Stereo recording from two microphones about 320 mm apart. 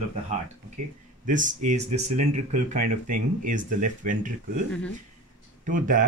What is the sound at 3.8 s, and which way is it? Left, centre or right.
Speech, right.